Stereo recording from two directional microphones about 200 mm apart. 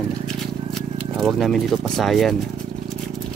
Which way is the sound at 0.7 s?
Centre (ahead or behind).